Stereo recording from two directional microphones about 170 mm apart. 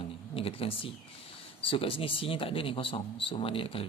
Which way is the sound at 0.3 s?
35° left (ahead or behind).